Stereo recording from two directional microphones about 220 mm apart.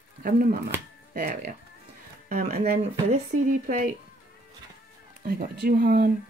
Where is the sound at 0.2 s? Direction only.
40° right (ahead or behind).